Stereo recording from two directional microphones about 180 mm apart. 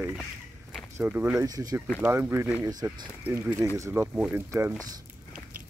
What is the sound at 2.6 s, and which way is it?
Speech, 20° right (ahead or behind).